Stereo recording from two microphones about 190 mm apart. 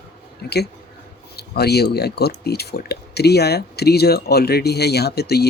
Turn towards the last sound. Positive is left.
turn(degrees=55)  # may be behind; listen again after turning